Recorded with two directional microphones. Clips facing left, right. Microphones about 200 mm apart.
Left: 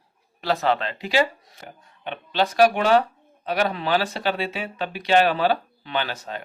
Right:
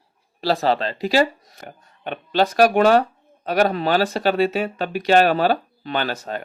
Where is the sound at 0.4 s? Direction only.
35° right (ahead or behind).